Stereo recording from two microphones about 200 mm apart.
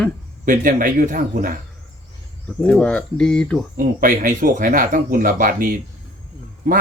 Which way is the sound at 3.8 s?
45° right (ahead or behind).